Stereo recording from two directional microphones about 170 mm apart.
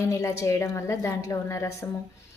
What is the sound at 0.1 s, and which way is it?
A woman's voice, 15° left (ahead or behind).